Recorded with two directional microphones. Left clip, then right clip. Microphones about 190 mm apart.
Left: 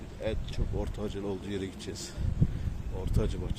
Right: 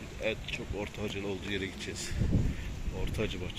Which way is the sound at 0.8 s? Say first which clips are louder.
Left 4 dB; 30° left (ahead or behind).